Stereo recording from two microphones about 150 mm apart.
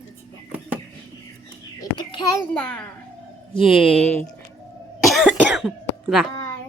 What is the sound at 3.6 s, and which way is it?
Speech, centre (ahead or behind).